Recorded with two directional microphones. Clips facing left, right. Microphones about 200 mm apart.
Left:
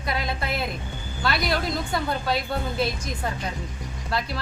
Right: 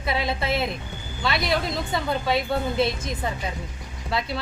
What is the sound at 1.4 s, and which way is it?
Speech, centre (ahead or behind).